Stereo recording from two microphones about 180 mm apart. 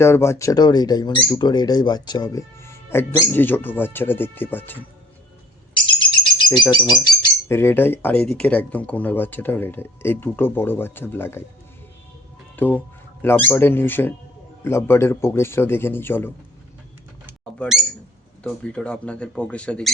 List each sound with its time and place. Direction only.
0.0 s speech: 15° left (ahead or behind)
5.7 s speech: 25° left (ahead or behind)
12.5 s speech: 10° left (ahead or behind)
17.6 s speech: centre (ahead or behind)